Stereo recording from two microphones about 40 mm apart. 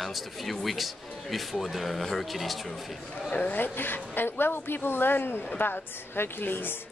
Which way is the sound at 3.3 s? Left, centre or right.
Left.